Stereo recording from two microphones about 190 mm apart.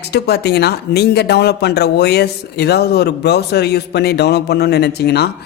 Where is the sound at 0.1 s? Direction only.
60° left (ahead or behind).